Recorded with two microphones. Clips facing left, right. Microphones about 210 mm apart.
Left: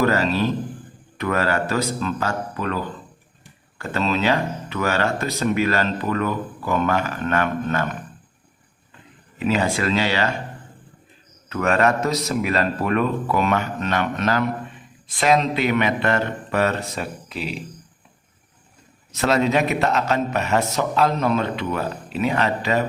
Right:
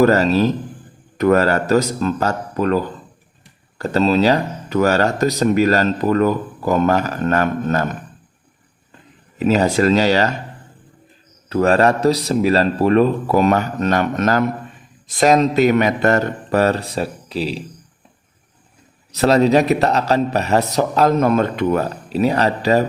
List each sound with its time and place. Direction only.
0.0 s speech: 40° right (ahead or behind)
9.4 s speech: 40° right (ahead or behind)
11.4 s speech: 35° right (ahead or behind)
19.1 s speech: 35° right (ahead or behind)